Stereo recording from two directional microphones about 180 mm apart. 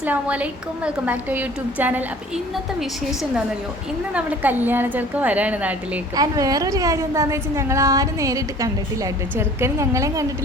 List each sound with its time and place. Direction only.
0.0 s a woman's voice: 10° right (ahead or behind)
4.1 s a woman's voice: 10° right (ahead or behind)
6.1 s a woman's voice: 20° right (ahead or behind)